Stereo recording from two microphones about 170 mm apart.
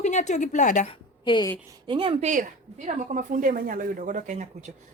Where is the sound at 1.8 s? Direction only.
30° right (ahead or behind).